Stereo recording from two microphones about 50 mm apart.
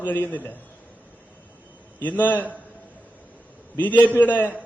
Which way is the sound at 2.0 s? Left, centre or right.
Left.